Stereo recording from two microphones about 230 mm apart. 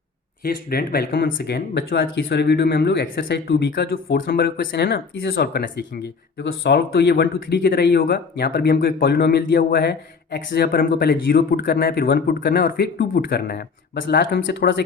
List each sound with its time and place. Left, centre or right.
0.4 s speech: left